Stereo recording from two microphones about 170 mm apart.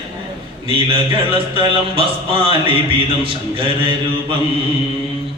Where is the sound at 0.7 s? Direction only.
30° right (ahead or behind).